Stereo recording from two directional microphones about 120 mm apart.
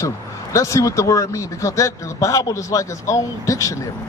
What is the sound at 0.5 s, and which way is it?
Speech, 25° left (ahead or behind).